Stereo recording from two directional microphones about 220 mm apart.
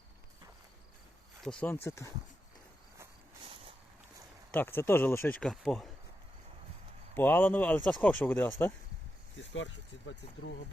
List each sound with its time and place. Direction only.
1.5 s speech: 5° left (ahead or behind)
4.5 s speech: 10° left (ahead or behind)
7.1 s speech: 10° left (ahead or behind)
9.4 s speech: 55° left (ahead or behind)